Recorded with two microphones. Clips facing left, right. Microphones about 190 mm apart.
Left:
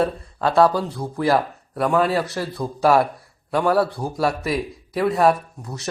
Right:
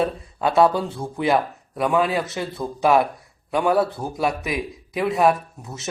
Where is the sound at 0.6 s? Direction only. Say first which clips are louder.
Left 1 dB; 25° right (ahead or behind).